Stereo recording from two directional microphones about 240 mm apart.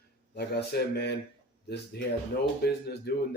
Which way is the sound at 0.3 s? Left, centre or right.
Left.